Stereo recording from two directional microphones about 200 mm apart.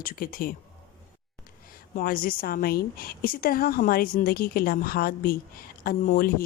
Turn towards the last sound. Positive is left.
turn(degrees=45)  # may be behind; listen again after turning